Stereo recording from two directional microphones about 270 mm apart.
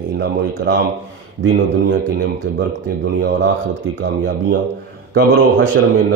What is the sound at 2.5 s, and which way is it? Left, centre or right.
Speech, right.